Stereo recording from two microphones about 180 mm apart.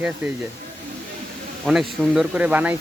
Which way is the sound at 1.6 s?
Centre (ahead or behind).